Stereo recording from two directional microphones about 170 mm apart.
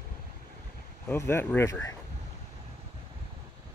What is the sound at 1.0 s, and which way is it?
Speech, 15° left (ahead or behind).